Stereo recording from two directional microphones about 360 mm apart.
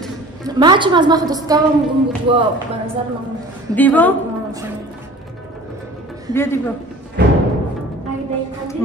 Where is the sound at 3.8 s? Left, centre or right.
Centre.